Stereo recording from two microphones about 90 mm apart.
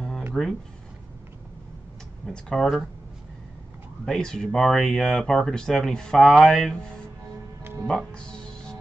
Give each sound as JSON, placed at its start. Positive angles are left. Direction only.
{"t": 0.3, "sound": "speech", "side_deg": 5}
{"t": 2.2, "sound": "speech", "side_deg": 5}
{"t": 4.0, "sound": "speech", "side_deg": 5}
{"t": 7.8, "sound": "music", "side_deg": 10}